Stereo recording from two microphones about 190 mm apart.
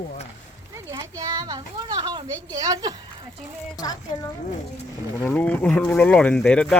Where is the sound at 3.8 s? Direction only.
20° left (ahead or behind).